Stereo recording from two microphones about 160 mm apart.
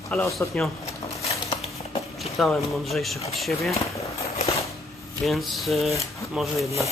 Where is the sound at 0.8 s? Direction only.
40° left (ahead or behind).